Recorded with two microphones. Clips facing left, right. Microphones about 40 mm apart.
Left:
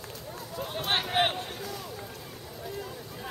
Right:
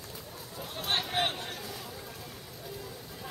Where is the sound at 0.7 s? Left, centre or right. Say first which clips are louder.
Left 4 dB; left.